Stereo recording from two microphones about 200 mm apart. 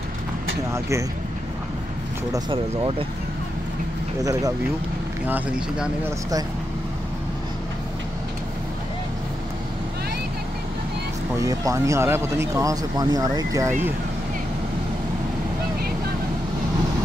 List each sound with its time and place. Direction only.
2.3 s speech: 25° right (ahead or behind)
4.2 s speech: 15° right (ahead or behind)
11.3 s speech: 15° right (ahead or behind)